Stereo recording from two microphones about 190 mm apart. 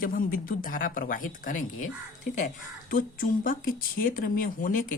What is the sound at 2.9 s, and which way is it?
Speech, 45° left (ahead or behind).